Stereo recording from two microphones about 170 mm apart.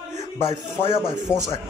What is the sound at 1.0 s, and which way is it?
Speech, 25° right (ahead or behind).